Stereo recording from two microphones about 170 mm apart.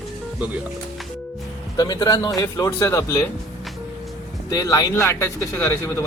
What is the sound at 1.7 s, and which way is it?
Speech, 20° left (ahead or behind).